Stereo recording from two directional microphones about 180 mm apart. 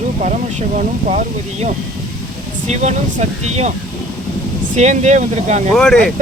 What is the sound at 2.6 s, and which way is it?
Speech, 40° right (ahead or behind).